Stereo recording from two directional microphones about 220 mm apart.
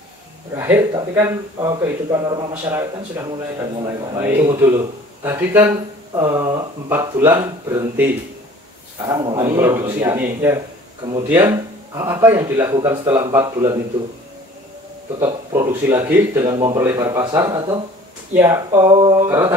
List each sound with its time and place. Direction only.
0.6 s a man's voice: 10° right (ahead or behind)
9.0 s a man's voice: 20° right (ahead or behind)
13.0 s a man's voice: 10° right (ahead or behind)
15.1 s a man's voice: 15° right (ahead or behind)